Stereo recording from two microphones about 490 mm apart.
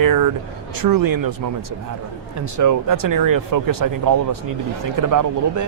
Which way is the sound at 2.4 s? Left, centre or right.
Right.